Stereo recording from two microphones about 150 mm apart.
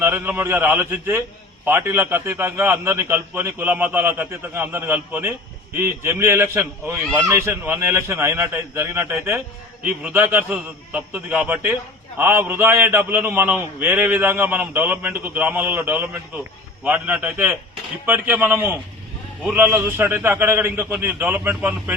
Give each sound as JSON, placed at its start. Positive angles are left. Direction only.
{"t": 0.0, "sound": "a man's voice", "side_deg": -15}